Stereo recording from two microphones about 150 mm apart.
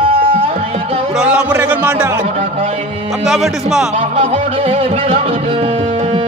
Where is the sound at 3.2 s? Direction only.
Centre (ahead or behind).